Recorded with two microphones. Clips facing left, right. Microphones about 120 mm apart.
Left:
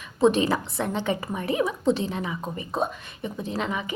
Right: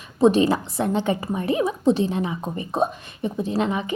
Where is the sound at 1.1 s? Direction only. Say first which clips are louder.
Right 4 dB; 30° right (ahead or behind).